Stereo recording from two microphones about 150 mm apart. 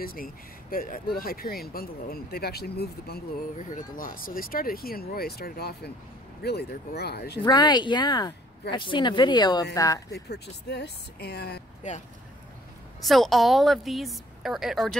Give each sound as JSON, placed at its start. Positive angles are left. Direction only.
{"t": 0.0, "sound": "speech", "side_deg": 75}
{"t": 7.4, "sound": "speech", "side_deg": 30}
{"t": 10.1, "sound": "speech", "side_deg": 90}
{"t": 13.0, "sound": "a woman's voice", "side_deg": 0}